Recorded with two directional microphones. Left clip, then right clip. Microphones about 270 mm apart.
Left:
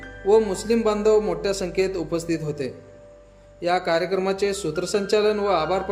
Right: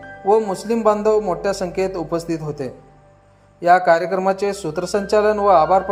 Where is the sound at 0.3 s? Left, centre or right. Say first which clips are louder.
Right 2 dB; centre.